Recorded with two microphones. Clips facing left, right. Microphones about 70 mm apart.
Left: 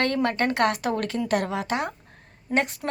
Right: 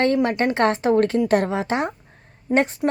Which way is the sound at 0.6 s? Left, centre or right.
Right.